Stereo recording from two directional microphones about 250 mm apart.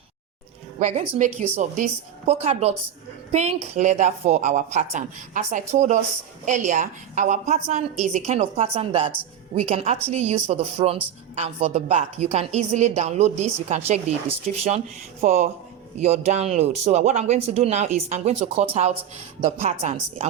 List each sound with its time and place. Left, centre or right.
0.8 s a woman's voice: right